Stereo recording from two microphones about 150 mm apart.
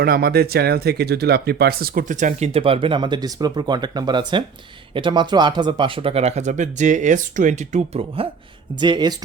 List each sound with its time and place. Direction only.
0.0 s speech: 90° right; by 8.3 s 40° right (ahead or behind)
8.8 s speech: 30° right (ahead or behind)